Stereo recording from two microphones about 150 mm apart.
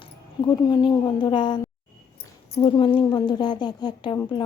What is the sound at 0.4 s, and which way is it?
A woman's voice, 30° left (ahead or behind).